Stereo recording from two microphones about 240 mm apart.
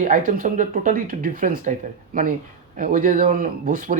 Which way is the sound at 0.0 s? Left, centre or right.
Right.